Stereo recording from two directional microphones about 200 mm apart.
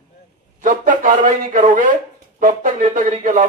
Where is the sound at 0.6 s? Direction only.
40° right (ahead or behind).